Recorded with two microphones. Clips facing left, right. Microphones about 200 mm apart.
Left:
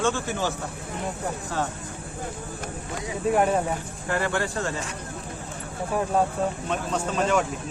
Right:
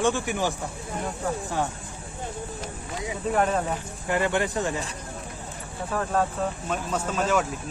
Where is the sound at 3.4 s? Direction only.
10° left (ahead or behind).